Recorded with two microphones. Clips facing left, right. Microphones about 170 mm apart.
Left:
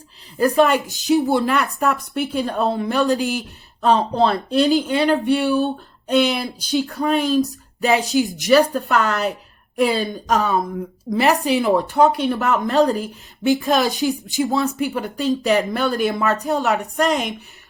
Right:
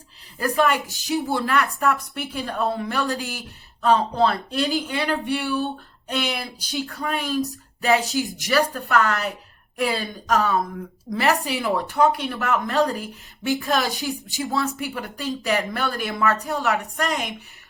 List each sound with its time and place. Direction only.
0.3 s speech: 25° left (ahead or behind)